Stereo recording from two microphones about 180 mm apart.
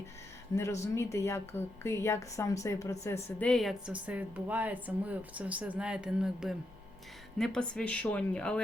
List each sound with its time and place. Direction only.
0.5 s speech: 15° left (ahead or behind)
3.2 s a woman's voice: 5° left (ahead or behind)